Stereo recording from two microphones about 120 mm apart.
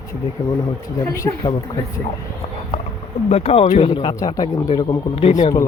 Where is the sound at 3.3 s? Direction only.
55° left (ahead or behind).